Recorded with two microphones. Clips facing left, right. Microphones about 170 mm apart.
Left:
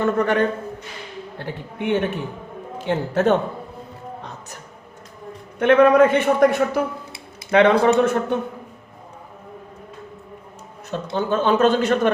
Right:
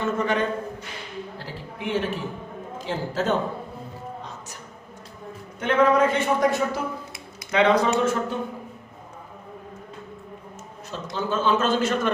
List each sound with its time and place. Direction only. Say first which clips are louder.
0.0 s a man's voice: left 5 dB; 60° left (ahead or behind)
1.4 s a sound: left 6 dB; 60° left (ahead or behind)
2.8 s a man's voice: left 7 dB; 65° left (ahead or behind)
5.5 s a man's voice: left 6 dB; 60° left (ahead or behind)
10.9 s a man's voice: left 5 dB; 60° left (ahead or behind)